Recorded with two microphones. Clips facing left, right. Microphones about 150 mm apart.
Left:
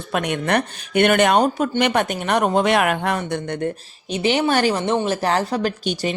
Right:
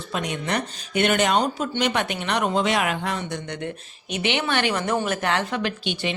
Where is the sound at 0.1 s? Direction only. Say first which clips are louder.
Left 6 dB; 60° left (ahead or behind).